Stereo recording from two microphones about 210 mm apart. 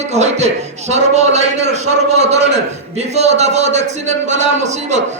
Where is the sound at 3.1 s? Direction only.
30° right (ahead or behind).